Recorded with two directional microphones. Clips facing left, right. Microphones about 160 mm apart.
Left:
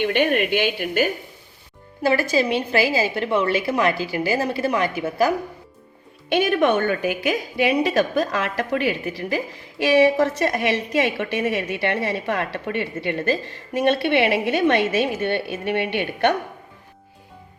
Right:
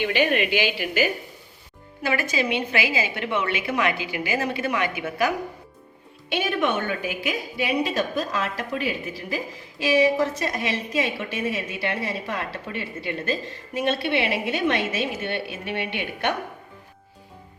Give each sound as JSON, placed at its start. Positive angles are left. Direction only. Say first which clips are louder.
{"t": 0.0, "sound": "a woman's voice", "louder": "left 2 dB", "side_deg": 55}
{"t": 2.0, "sound": "a woman's voice", "louder": "left 6 dB", "side_deg": 35}
{"t": 6.2, "sound": "a woman's voice", "louder": "left 6 dB", "side_deg": 50}